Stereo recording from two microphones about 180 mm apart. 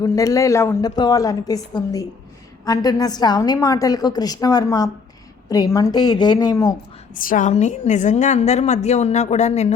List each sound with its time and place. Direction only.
0.0 s a woman's voice: 20° left (ahead or behind)
7.1 s a woman's voice: 50° left (ahead or behind)